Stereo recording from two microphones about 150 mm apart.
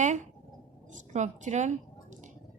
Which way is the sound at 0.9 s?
55° right (ahead or behind).